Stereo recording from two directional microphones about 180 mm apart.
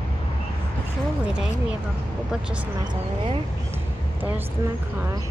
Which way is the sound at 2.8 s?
25° right (ahead or behind).